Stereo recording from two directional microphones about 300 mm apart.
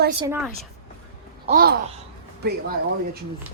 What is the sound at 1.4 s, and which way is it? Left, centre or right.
Speech, right.